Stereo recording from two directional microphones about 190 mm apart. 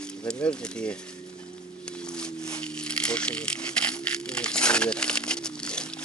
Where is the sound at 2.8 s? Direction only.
5° left (ahead or behind).